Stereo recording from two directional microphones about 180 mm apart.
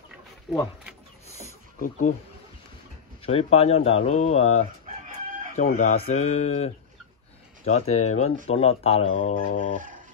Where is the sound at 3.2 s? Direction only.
35° left (ahead or behind).